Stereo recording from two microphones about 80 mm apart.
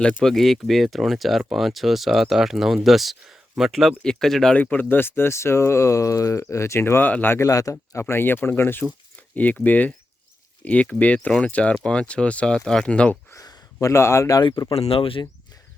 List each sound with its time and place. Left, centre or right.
0.0 s speech: centre
4.5 s speech: centre
7.3 s speech: left; by 13.1 s centre
13.8 s speech: left
14.4 s speech: left